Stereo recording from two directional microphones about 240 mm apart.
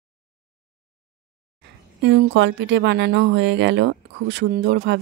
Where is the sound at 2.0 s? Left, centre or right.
Right.